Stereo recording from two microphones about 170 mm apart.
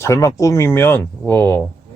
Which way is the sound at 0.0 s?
20° left (ahead or behind).